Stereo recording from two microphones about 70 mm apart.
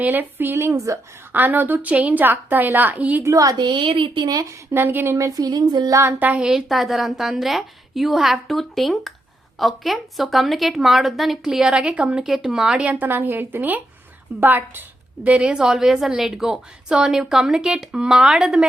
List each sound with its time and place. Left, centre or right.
0.0 s a woman's voice: right
0.5 s a woman's voice: right
3.2 s speech: right
4.7 s speech: right
5.1 s speech: right
5.9 s speech: right
6.1 s a woman's voice: right
6.4 s a woman's voice: centre
13.1 s a woman's voice: right
15.3 s a woman's voice: centre